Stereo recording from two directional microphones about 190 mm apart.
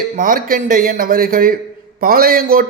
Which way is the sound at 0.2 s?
45° right (ahead or behind).